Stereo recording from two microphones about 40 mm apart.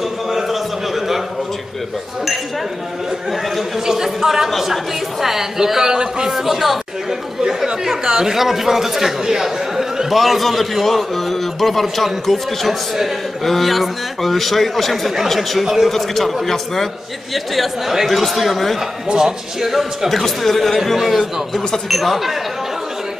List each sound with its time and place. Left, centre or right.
0.3 s a sound: centre
3.3 s a man's voice: centre
3.8 s a man's voice: centre
6.3 s a man's voice: centre
15.6 s speech: centre
15.9 s a man's voice: centre
19.0 s a man's voice: centre